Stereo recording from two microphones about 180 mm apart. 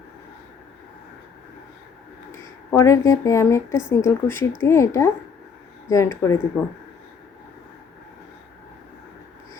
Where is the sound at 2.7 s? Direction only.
15° left (ahead or behind).